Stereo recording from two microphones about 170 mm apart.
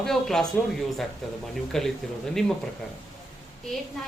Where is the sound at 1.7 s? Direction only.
5° left (ahead or behind).